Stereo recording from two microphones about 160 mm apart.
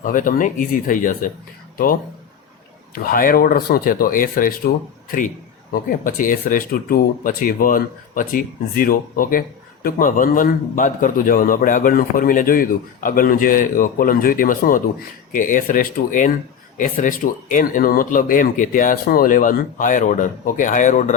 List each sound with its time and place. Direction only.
0.0 s a man's voice: 55° left (ahead or behind)
5.7 s a man's voice: 60° left (ahead or behind)